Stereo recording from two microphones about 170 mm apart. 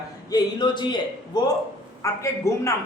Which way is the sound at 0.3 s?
25° left (ahead or behind).